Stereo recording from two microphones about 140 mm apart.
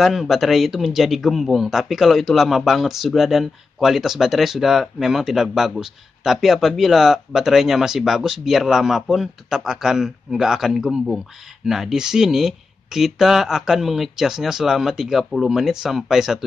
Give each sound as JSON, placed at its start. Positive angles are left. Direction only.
{"t": 0.0, "sound": "speech", "side_deg": 0}